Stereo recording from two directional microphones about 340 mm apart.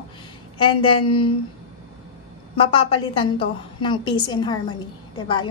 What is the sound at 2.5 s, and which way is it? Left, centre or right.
A woman's voice, centre.